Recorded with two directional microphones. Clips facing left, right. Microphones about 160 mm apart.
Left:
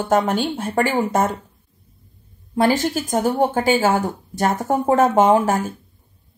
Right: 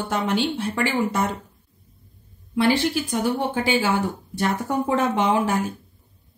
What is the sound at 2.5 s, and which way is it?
Speech, 45° left (ahead or behind).